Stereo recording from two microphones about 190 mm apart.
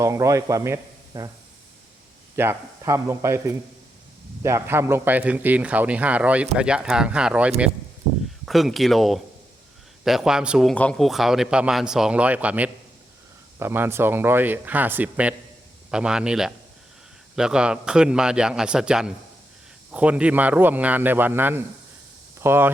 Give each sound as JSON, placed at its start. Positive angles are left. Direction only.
{"t": 0.0, "sound": "speech", "side_deg": -15}
{"t": 2.3, "sound": "speech", "side_deg": -15}
{"t": 4.4, "sound": "a man's voice", "side_deg": -15}